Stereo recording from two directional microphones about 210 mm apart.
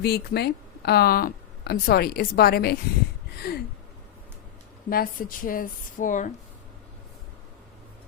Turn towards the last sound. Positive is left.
turn(degrees=35)  # may be behind; listen again after turning